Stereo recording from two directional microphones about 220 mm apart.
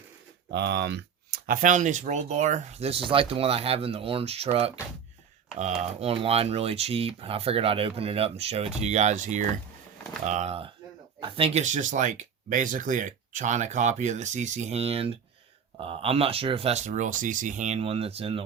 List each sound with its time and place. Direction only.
0.5 s speech: 50° right (ahead or behind); by 18.4 s 25° right (ahead or behind)